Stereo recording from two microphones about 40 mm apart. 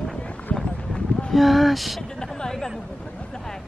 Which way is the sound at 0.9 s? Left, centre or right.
Left.